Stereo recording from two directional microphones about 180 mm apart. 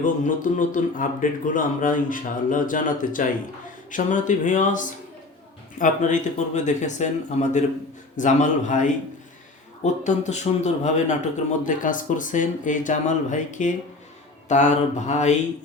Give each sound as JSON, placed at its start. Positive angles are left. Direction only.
{"t": 0.0, "sound": "a man's voice", "side_deg": 45}